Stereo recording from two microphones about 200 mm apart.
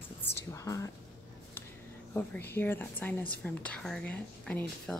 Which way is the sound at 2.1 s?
15° left (ahead or behind).